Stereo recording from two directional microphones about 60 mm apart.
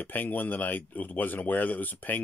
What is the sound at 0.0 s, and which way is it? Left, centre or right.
Speech, left.